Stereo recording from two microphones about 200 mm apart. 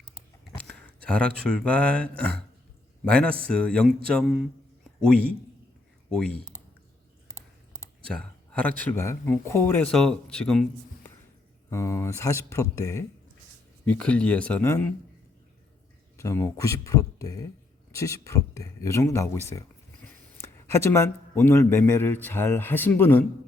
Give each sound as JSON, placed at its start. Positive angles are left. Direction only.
{"t": 0.7, "sound": "a man's voice", "side_deg": 5}
{"t": 6.1, "sound": "speech", "side_deg": 5}
{"t": 8.1, "sound": "speech", "side_deg": 5}
{"t": 11.7, "sound": "speech", "side_deg": 15}
{"t": 16.1, "sound": "speech", "side_deg": 15}